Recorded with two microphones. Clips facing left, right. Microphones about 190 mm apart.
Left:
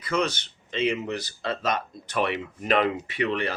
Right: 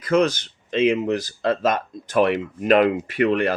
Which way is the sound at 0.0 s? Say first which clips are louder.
Right 8 dB; 50° right (ahead or behind).